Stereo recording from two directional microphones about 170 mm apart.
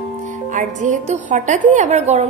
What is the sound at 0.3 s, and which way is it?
A woman's voice, 50° right (ahead or behind).